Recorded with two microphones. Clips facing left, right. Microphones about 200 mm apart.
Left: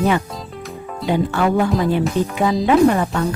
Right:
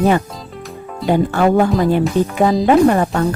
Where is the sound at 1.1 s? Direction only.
45° right (ahead or behind).